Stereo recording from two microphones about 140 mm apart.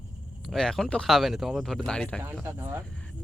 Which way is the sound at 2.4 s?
15° right (ahead or behind).